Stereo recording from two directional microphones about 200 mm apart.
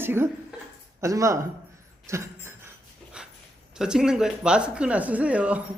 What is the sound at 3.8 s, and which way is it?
Speech, 5° right (ahead or behind).